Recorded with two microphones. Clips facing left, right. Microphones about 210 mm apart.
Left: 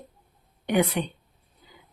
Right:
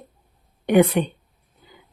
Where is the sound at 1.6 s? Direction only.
60° right (ahead or behind).